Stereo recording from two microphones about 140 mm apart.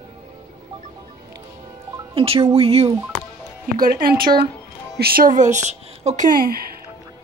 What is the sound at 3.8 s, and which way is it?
Speech, 90° right.